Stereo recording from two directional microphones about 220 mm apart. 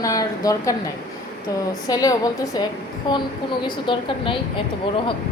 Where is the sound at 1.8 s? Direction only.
15° left (ahead or behind).